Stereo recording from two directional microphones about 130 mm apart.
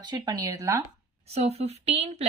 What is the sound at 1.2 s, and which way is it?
Speech, 55° right (ahead or behind).